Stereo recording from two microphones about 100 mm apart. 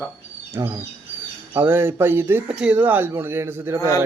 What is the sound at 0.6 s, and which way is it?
Speech, 25° right (ahead or behind).